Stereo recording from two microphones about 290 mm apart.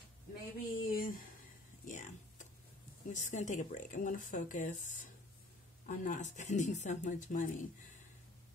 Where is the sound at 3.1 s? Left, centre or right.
Left.